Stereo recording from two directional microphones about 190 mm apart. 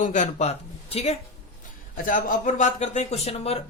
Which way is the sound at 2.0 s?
45° left (ahead or behind).